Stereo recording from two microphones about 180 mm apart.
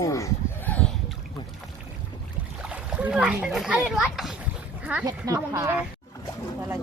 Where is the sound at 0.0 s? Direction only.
15° left (ahead or behind).